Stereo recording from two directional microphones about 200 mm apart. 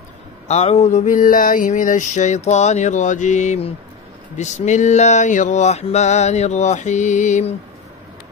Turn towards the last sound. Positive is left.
turn(degrees=35)  # may be behind; listen again after turning